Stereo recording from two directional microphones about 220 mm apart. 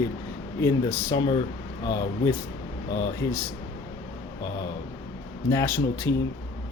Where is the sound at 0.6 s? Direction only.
15° left (ahead or behind).